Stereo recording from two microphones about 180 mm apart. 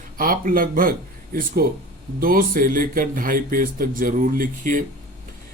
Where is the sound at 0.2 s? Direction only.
50° right (ahead or behind).